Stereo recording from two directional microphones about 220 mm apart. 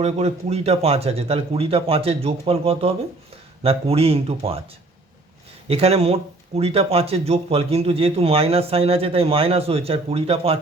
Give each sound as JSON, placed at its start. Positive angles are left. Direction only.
{"t": 0.0, "sound": "speech", "side_deg": -30}
{"t": 5.6, "sound": "speech", "side_deg": -25}